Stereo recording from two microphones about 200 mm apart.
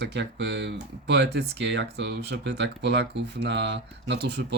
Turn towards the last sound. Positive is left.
turn(degrees=-60)  # may be behind; listen again after turning